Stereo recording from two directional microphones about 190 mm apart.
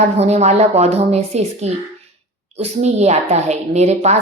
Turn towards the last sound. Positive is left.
turn(degrees=-35)  # may be behind; listen again after turning